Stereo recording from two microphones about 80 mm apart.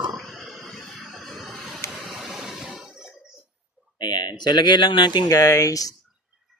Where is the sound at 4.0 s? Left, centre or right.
Left.